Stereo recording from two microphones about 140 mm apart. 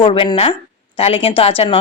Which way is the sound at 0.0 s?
35° left (ahead or behind).